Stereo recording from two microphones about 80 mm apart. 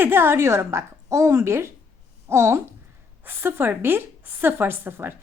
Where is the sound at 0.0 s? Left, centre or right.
Right.